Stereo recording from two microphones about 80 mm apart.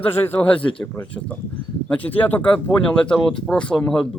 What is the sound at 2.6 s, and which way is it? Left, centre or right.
Speech, centre.